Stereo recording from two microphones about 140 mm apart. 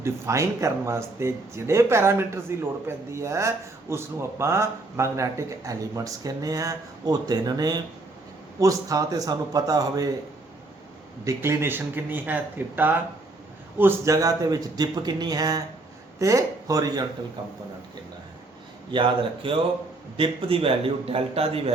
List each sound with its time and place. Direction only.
0.0 s speech: 20° right (ahead or behind)
11.3 s speech: 20° right (ahead or behind)
18.9 s a man's voice: 35° right (ahead or behind)